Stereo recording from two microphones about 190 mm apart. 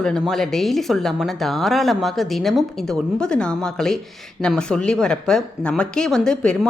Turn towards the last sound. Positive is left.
turn(degrees=5)  # may be behind; listen again after turning